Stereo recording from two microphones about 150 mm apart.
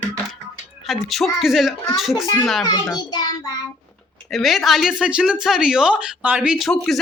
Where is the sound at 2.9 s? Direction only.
25° left (ahead or behind).